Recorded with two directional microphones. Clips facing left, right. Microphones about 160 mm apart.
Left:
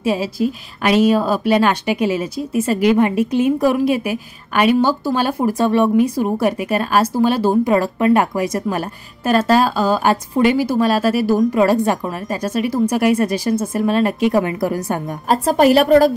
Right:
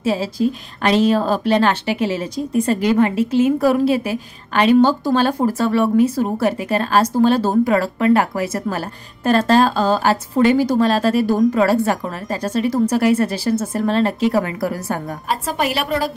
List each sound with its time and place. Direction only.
0.0 s a woman's voice: 10° left (ahead or behind)
7.6 s a woman's voice: 20° left (ahead or behind)
11.6 s a woman's voice: 20° left (ahead or behind)
15.2 s a woman's voice: 40° left (ahead or behind)